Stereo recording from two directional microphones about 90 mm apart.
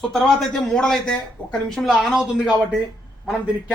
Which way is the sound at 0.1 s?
5° left (ahead or behind).